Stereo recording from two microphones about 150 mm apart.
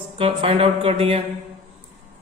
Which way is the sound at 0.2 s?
40° right (ahead or behind).